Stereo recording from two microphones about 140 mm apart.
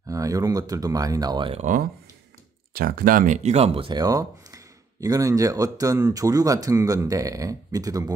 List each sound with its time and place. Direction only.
0.1 s speech: 25° right (ahead or behind)
1.5 s speech: 65° right (ahead or behind)
2.7 s speech: 90° right; by 4.0 s 40° right (ahead or behind)
4.0 s speech: 25° right (ahead or behind)